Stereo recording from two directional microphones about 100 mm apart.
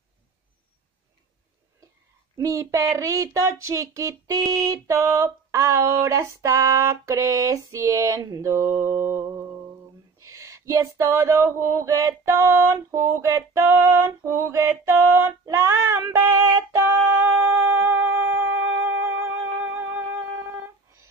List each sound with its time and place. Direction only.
2.3 s speech: 35° right (ahead or behind)
10.1 s a sound: 35° right (ahead or behind)
17.3 s humming: 25° right (ahead or behind)